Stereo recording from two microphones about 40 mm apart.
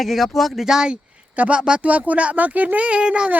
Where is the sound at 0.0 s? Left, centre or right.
Centre.